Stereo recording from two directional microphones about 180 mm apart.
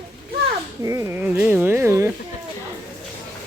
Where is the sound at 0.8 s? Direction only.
15° right (ahead or behind).